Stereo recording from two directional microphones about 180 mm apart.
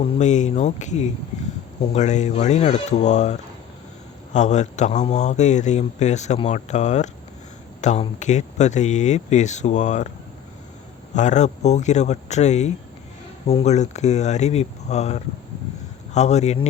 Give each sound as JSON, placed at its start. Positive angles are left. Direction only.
{"t": 0.0, "sound": "speech", "side_deg": 35}
{"t": 11.1, "sound": "speech", "side_deg": 40}